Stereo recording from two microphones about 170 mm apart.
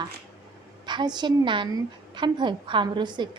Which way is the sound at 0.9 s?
25° right (ahead or behind).